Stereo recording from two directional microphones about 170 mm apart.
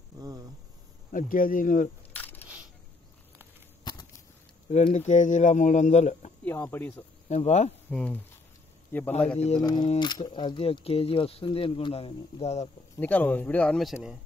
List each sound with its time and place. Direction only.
0.2 s a sound: 20° right (ahead or behind)
1.1 s speech: 55° left (ahead or behind)
2.1 s coin: 10° left (ahead or behind)
3.9 s a sound: 25° left (ahead or behind)
4.6 s speech: 40° left (ahead or behind)
6.4 s speech: 10° left (ahead or behind)
7.2 s speech: 40° left (ahead or behind)
7.9 s speech: 5° left (ahead or behind)
9.6 s speech: 25° left (ahead or behind); by 12.6 s 40° left (ahead or behind)
12.9 s speech: 10° left (ahead or behind)